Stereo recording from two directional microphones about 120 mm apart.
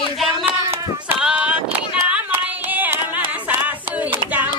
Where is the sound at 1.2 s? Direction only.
10° right (ahead or behind).